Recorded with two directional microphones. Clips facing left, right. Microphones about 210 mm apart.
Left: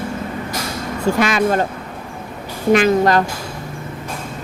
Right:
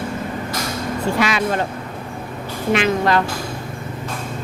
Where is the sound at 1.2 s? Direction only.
45° left (ahead or behind).